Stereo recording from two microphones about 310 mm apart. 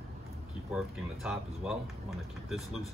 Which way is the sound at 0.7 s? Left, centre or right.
Centre.